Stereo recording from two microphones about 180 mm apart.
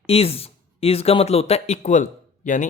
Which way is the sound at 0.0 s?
35° left (ahead or behind).